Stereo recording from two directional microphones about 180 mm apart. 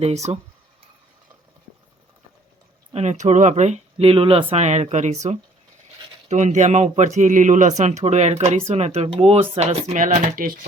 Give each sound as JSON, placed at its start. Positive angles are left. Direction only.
{"t": 0.0, "sound": "speech", "side_deg": -40}
{"t": 2.9, "sound": "speech", "side_deg": -40}